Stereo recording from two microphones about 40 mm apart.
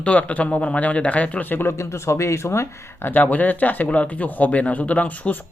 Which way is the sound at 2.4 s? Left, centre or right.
Left.